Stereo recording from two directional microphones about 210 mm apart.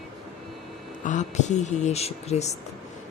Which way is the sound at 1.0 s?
35° left (ahead or behind).